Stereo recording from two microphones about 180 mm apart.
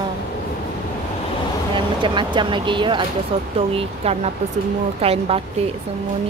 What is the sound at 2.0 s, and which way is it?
Speech, 25° right (ahead or behind).